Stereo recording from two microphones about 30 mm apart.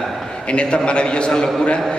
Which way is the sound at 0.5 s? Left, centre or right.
Left.